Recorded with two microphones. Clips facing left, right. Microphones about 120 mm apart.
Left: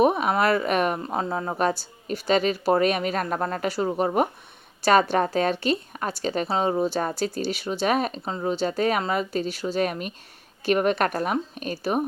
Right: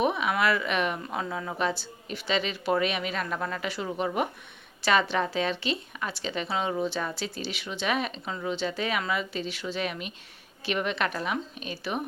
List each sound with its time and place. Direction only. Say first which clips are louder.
0.0 s a woman's voice: left 5 dB; 40° left (ahead or behind)